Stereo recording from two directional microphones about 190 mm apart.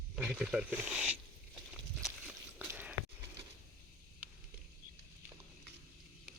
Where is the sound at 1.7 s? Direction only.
5° right (ahead or behind).